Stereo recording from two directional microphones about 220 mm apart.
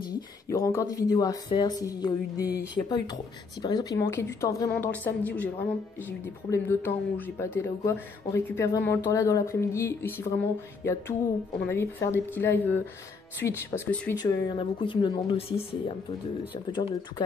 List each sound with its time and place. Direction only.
0.5 s speech: 15° left (ahead or behind)
14.2 s speech: 20° left (ahead or behind)